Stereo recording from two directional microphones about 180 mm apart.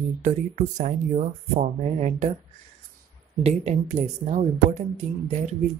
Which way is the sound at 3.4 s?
35° right (ahead or behind).